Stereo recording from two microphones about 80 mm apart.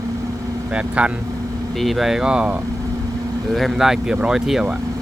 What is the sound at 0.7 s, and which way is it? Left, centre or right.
Speech, centre.